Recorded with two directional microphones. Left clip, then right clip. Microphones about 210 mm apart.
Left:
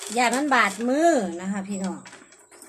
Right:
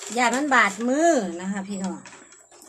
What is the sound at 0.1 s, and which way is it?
Speech, 10° right (ahead or behind).